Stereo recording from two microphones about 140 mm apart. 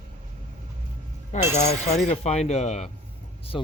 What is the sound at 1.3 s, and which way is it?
Speech, 55° left (ahead or behind).